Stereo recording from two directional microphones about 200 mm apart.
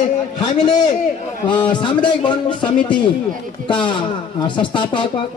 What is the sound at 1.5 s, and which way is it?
A man's voice, 25° left (ahead or behind).